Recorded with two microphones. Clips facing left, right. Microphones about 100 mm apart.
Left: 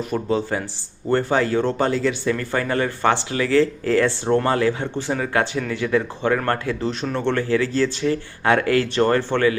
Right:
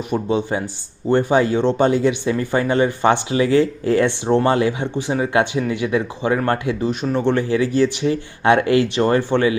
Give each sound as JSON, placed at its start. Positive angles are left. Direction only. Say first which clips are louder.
{"t": 0.1, "sound": "speech", "louder": "right 3 dB", "side_deg": -20}